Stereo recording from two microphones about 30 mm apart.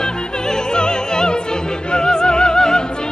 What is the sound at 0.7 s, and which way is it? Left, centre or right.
Opera, left.